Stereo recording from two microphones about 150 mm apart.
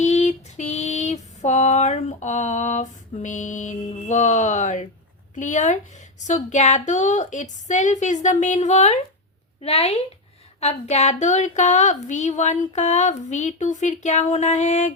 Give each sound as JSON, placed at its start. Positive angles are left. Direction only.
{"t": 0.0, "sound": "female singing", "side_deg": 50}
{"t": 5.3, "sound": "a sound", "side_deg": 55}
{"t": 6.1, "sound": "a woman's voice", "side_deg": 50}